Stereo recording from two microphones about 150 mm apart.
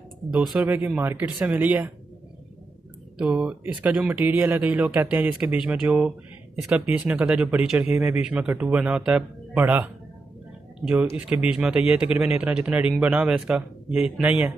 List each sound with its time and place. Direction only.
0.3 s speech: 5° right (ahead or behind)
3.2 s speech: 5° right (ahead or behind)
11.1 s speech: 10° right (ahead or behind)